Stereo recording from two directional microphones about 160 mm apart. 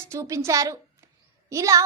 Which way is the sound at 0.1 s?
20° right (ahead or behind).